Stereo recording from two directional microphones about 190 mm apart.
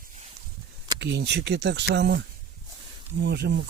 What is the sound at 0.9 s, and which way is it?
Speech, 60° right (ahead or behind).